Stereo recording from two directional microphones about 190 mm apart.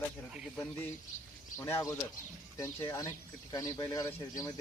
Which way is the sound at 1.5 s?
15° left (ahead or behind).